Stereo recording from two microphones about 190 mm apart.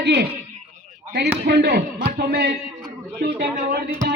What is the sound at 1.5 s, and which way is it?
Speech, 60° right (ahead or behind).